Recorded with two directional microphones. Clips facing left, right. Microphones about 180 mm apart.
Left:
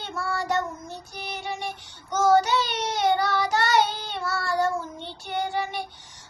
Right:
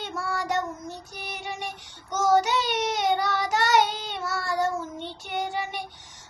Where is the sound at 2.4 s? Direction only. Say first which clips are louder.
Left 1 dB; 15° right (ahead or behind).